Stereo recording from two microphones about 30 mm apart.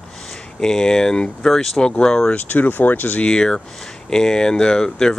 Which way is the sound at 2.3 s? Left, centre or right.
Left.